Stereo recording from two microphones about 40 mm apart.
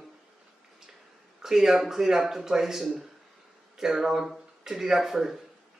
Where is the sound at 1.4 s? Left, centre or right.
Centre.